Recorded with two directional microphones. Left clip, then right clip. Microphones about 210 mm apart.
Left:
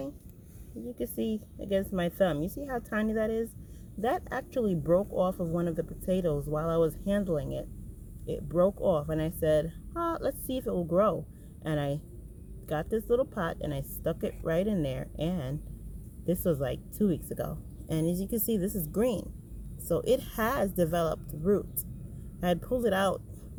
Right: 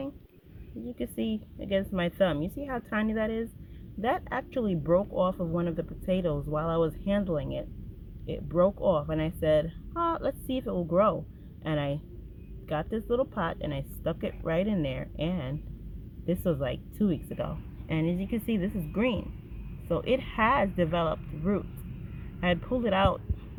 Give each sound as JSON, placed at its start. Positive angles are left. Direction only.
{"t": 1.2, "sound": "speech", "side_deg": 20}
{"t": 4.6, "sound": "speech", "side_deg": 20}
{"t": 12.6, "sound": "speech", "side_deg": 25}